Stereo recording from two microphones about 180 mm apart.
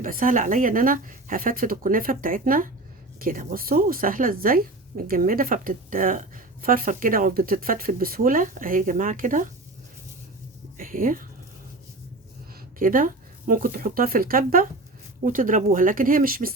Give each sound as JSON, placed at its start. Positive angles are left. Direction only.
{"t": 0.0, "sound": "a woman's voice", "side_deg": -50}
{"t": 10.8, "sound": "speech", "side_deg": -50}
{"t": 12.8, "sound": "a woman's voice", "side_deg": -50}